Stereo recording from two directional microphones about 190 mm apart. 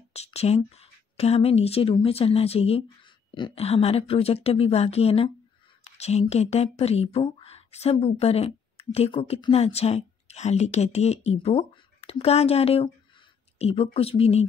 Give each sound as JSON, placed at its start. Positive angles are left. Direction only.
{"t": 0.1, "sound": "speech", "side_deg": 35}